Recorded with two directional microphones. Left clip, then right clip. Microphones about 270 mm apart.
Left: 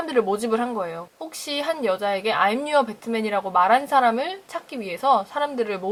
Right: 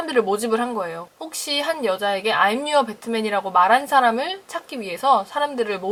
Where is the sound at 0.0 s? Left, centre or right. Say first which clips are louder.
Right 2 dB; centre.